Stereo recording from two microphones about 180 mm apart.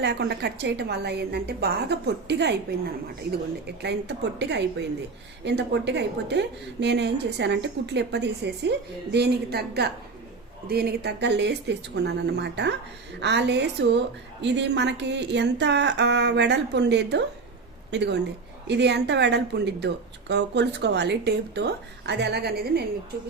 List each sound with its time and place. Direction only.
0.0 s a woman's voice: 65° right (ahead or behind)